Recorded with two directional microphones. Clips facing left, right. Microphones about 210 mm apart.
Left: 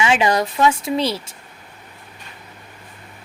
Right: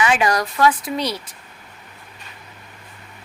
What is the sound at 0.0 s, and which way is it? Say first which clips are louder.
Speech: left 1 dB; 25° left (ahead or behind).